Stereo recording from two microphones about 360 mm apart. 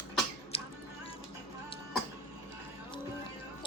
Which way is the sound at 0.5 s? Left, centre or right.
Centre.